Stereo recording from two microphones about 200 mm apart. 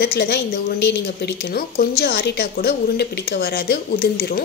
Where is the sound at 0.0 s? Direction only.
55° left (ahead or behind).